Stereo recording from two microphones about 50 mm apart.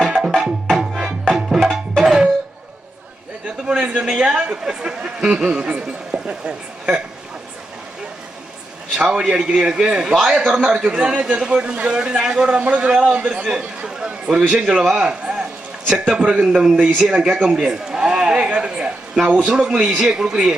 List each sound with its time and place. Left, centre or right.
0.0 s music: centre
3.7 s a sound: centre
4.3 s speech: centre
9.0 s a man's voice: centre
10.2 s a man's voice: centre
16.8 s a man's voice: centre
19.9 s a man's voice: centre